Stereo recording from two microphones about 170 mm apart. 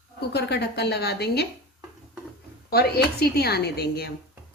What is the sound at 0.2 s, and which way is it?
Speech, 75° left (ahead or behind).